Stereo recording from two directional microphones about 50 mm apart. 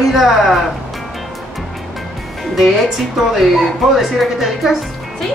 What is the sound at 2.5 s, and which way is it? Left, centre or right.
Speech, centre.